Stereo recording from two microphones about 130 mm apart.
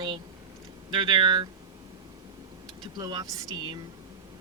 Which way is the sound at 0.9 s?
40° right (ahead or behind).